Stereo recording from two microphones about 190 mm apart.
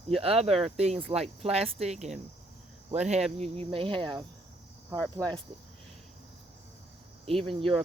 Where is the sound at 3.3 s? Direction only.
35° right (ahead or behind).